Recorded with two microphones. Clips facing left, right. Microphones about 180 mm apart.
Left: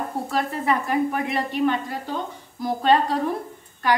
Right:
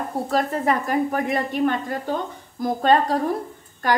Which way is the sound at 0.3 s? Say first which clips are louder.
Right 3 dB; 45° right (ahead or behind).